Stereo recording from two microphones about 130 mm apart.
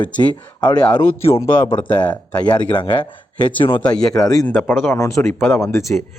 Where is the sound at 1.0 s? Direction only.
20° left (ahead or behind).